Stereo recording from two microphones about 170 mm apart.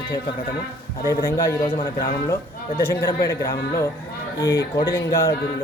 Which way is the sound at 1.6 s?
30° left (ahead or behind).